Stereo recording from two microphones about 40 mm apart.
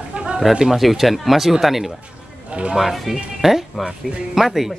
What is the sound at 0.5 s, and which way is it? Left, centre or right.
Speech, centre.